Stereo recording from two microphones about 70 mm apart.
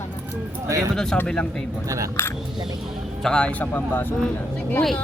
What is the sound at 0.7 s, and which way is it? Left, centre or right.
Speech, right.